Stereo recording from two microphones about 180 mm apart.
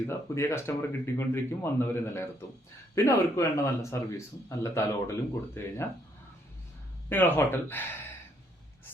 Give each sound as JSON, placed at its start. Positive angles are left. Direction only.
{"t": 0.1, "sound": "speech", "side_deg": 15}
{"t": 7.1, "sound": "speech", "side_deg": 10}